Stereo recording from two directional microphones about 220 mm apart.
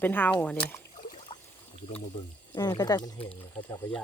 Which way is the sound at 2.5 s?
15° left (ahead or behind).